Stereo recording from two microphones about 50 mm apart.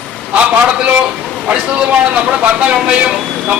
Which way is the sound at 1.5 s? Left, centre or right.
Right.